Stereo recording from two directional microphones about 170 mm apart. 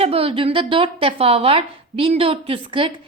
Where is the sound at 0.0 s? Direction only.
35° right (ahead or behind).